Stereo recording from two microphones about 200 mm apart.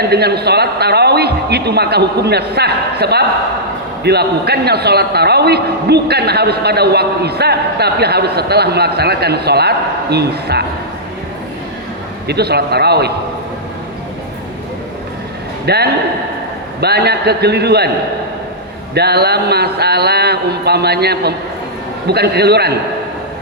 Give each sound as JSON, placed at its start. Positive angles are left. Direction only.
{"t": 0.1, "sound": "a man's voice", "side_deg": -55}
{"t": 12.3, "sound": "a man's voice", "side_deg": -55}
{"t": 15.6, "sound": "a man's voice", "side_deg": -55}
{"t": 18.9, "sound": "a man's voice", "side_deg": -55}